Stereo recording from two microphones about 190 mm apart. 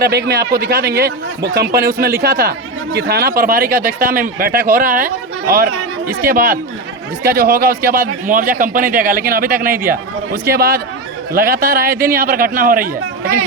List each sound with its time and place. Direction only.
0.0 s a man's voice: 60° right (ahead or behind)